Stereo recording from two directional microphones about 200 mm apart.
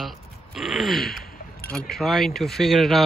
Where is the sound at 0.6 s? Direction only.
Centre (ahead or behind).